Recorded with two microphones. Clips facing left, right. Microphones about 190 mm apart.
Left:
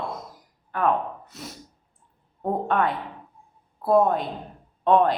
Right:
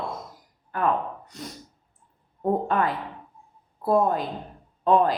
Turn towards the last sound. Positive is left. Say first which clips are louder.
# left 1 dB
turn(degrees=0)  # may be behind; listen again after turning